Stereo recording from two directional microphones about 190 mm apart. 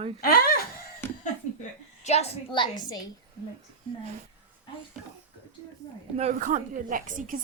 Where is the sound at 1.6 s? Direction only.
35° left (ahead or behind).